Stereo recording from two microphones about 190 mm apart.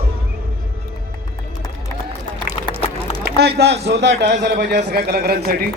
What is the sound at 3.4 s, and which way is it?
A man's voice, 60° right (ahead or behind).